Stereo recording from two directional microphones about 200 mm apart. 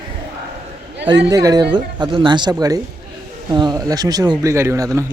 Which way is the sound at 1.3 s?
15° right (ahead or behind).